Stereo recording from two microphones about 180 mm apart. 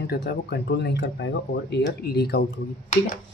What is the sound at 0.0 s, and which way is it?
Speech, 65° left (ahead or behind).